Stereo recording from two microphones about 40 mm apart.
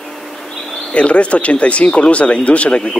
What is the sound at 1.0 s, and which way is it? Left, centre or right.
Speech, left.